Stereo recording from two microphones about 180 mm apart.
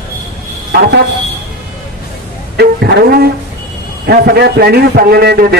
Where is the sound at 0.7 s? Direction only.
60° right (ahead or behind).